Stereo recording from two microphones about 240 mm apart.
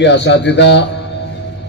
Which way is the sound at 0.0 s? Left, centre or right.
Left.